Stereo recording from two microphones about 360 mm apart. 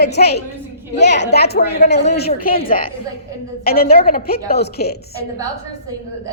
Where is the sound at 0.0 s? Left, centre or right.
Left.